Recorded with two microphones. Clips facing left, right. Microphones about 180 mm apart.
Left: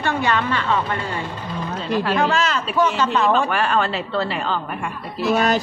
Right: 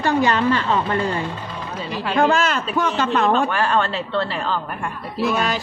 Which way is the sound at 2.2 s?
50° right (ahead or behind).